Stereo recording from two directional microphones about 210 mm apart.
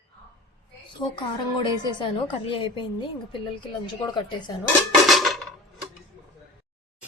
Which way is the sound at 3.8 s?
20° left (ahead or behind).